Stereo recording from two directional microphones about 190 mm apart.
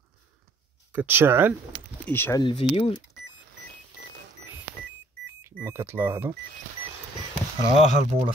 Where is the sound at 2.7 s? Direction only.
30° left (ahead or behind).